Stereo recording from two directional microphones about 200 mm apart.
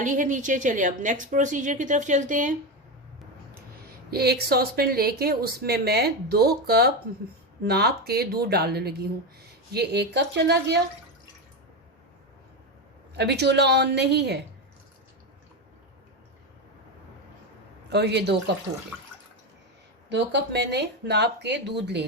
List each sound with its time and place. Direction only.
0.0 s a woman's voice: 40° right (ahead or behind)
4.1 s speech: 50° right (ahead or behind)
13.1 s speech: 55° right (ahead or behind)
17.8 s speech: 55° right (ahead or behind)
20.1 s speech: 60° right (ahead or behind)